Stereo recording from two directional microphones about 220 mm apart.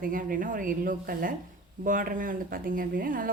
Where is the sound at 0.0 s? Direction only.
40° right (ahead or behind).